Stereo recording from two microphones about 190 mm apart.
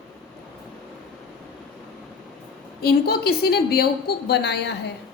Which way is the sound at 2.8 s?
55° left (ahead or behind).